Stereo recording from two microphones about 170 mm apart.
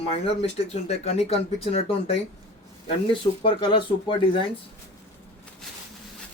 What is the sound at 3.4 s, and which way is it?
Speech, 30° left (ahead or behind).